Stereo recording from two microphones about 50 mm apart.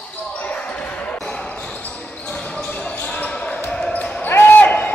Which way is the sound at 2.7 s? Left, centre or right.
Left.